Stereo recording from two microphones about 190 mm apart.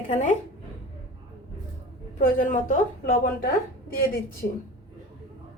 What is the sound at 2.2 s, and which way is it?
Speech, 45° left (ahead or behind).